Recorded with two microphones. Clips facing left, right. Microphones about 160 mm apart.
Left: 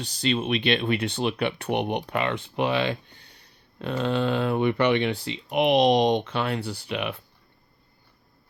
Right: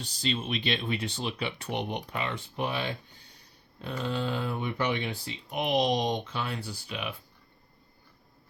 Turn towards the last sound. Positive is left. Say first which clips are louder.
# left 7 dB
turn(degrees=65)  # may be behind; listen again after turning